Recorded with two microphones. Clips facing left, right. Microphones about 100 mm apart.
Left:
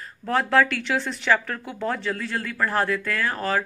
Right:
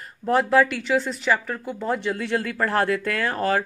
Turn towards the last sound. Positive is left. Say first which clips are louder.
# right 2 dB
turn(degrees=-40)  # may be behind; listen again after turning